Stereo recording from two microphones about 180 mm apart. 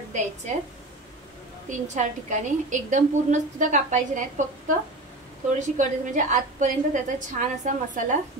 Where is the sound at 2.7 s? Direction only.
45° right (ahead or behind).